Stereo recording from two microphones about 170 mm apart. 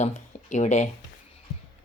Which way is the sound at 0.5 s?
40° left (ahead or behind).